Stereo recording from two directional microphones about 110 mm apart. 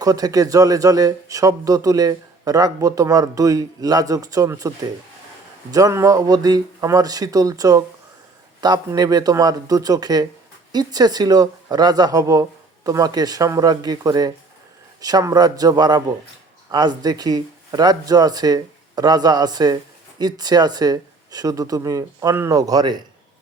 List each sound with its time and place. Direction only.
0.0 s speech: 35° right (ahead or behind)
5.7 s speech: 30° right (ahead or behind)